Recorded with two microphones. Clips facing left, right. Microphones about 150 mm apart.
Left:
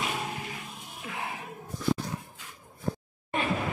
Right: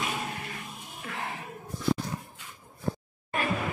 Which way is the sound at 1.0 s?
10° left (ahead or behind).